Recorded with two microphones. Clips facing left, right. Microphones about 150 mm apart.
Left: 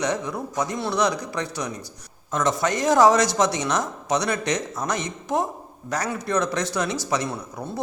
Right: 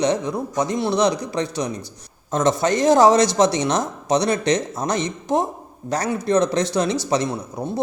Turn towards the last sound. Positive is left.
turn(degrees=-20)  # may be behind; listen again after turning